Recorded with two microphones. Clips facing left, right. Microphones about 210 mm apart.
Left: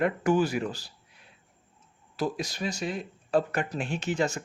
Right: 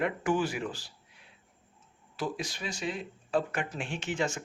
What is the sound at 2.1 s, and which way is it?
Speech, 40° left (ahead or behind).